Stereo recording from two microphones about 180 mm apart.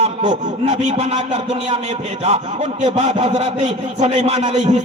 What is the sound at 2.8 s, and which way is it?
Speech, 40° right (ahead or behind).